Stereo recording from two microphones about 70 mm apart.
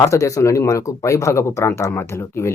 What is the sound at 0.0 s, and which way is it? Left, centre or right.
Speech, left.